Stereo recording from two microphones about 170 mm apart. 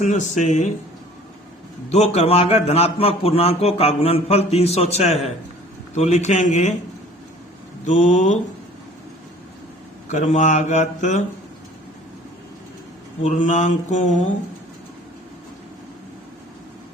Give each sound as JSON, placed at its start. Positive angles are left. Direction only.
{"t": 0.0, "sound": "mantra", "side_deg": 45}
{"t": 1.9, "sound": "a man's voice", "side_deg": 40}
{"t": 5.9, "sound": "mantra", "side_deg": 40}
{"t": 7.9, "sound": "mantra", "side_deg": 45}
{"t": 10.1, "sound": "mantra", "side_deg": 45}
{"t": 13.2, "sound": "mantra", "side_deg": 45}